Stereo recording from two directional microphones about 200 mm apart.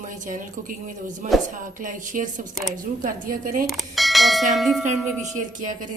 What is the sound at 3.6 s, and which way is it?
Bell, centre (ahead or behind).